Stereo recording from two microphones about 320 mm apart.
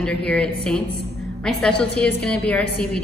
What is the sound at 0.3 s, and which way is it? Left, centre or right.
A woman's voice, centre.